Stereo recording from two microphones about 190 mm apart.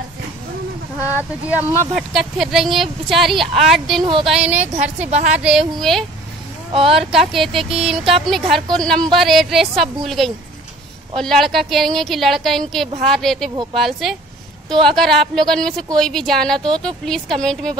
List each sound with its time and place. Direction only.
2.0 s a woman's voice: centre (ahead or behind)
4.0 s speech: 25° right (ahead or behind)
4.3 s a woman's voice: 5° right (ahead or behind)
6.7 s speech: 30° right (ahead or behind)
7.0 s a woman's voice: centre (ahead or behind)